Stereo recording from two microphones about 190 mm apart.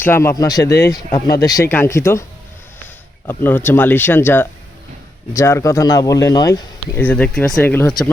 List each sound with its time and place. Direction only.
0.0 s speech: 15° left (ahead or behind)
3.2 s speech: 10° left (ahead or behind)